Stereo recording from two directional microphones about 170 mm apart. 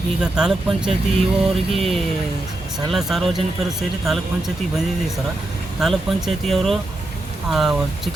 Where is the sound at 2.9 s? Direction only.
Centre (ahead or behind).